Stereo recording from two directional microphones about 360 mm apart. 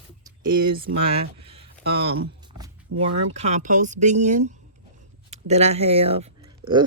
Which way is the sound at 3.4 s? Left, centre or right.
Centre.